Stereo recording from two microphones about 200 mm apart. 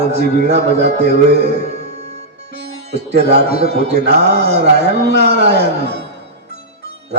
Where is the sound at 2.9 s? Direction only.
55° right (ahead or behind).